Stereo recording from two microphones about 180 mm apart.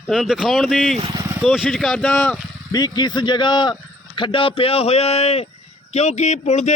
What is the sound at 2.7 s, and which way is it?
A man's voice, 20° left (ahead or behind).